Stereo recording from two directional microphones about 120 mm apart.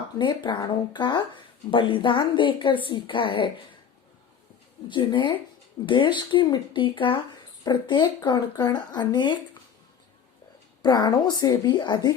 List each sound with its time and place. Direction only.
0.2 s speech: 40° left (ahead or behind)
4.9 s speech: 45° left (ahead or behind)
10.8 s speech: 35° left (ahead or behind)